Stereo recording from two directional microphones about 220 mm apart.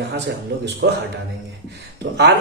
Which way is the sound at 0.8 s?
60° right (ahead or behind).